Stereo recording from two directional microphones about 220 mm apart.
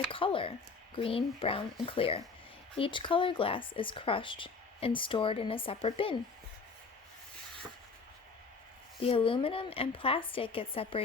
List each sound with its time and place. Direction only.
0.1 s speech: 25° left (ahead or behind)
9.0 s speech: 25° left (ahead or behind)